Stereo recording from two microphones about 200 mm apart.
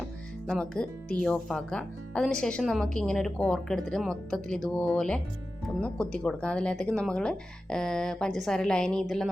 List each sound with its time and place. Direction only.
0.4 s speech: 5° left (ahead or behind)